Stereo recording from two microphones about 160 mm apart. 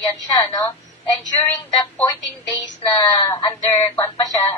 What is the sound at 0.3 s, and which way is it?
Speech, 20° left (ahead or behind).